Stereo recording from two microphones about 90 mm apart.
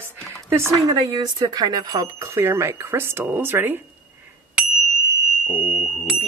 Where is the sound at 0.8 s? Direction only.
45° right (ahead or behind); by 3.8 s 25° right (ahead or behind).